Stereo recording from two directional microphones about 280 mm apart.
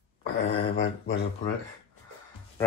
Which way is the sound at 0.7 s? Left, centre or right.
Left.